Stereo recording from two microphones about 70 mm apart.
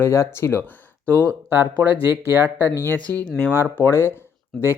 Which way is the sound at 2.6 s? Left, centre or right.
Left.